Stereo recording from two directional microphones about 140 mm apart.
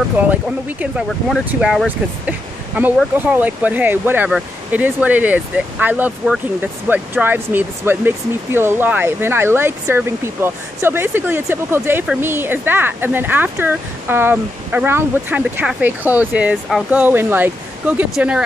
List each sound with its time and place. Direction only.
0.3 s speech: 10° right (ahead or behind)